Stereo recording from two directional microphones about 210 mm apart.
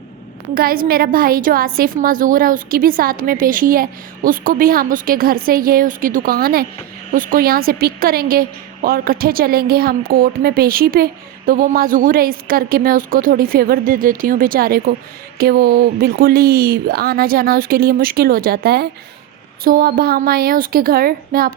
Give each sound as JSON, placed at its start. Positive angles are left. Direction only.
{"t": 0.5, "sound": "a woman's voice", "side_deg": -45}